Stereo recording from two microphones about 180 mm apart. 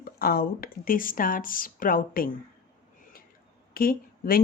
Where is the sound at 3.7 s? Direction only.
55° left (ahead or behind).